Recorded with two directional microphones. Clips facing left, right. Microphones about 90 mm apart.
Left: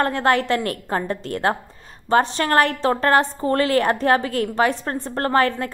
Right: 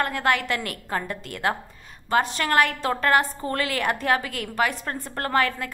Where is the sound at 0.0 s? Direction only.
35° left (ahead or behind).